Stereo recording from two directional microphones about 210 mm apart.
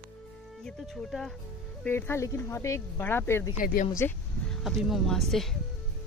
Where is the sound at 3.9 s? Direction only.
10° left (ahead or behind).